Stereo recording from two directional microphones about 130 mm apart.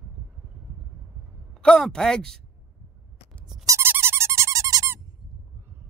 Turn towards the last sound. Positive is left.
turn(degrees=-25)  # may be behind; listen again after turning